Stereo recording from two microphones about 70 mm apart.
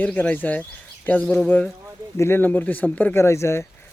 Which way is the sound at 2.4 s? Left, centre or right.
Left.